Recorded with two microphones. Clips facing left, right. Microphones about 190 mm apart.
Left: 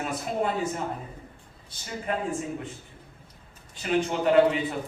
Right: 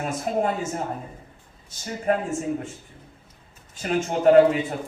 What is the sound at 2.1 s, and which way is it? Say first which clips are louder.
Speech: right 7 dB; 40° right (ahead or behind).